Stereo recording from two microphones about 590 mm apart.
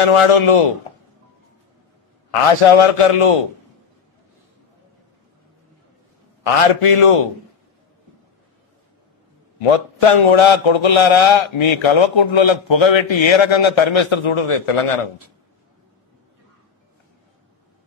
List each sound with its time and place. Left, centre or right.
0.0 s a man's voice: left
2.6 s a man's voice: left
6.4 s a man's voice: left
9.6 s a man's voice: left